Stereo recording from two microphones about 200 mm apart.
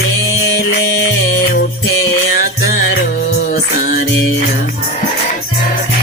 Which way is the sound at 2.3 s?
50° left (ahead or behind).